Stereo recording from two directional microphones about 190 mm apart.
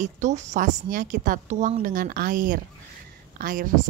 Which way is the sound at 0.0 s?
40° right (ahead or behind).